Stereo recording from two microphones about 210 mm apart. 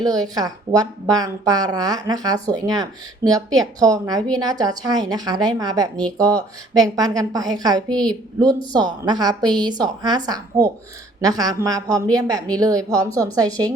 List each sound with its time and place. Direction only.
0.0 s a woman's voice: 20° right (ahead or behind)